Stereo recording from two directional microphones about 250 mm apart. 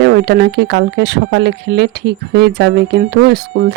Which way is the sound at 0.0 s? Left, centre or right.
Right.